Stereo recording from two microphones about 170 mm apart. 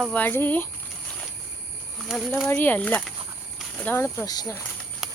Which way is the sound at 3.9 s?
15° left (ahead or behind).